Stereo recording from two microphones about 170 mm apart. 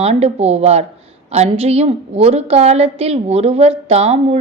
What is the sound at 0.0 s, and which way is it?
A woman's voice, 40° right (ahead or behind).